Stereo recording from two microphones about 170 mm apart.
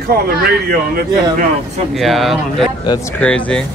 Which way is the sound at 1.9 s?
Centre (ahead or behind).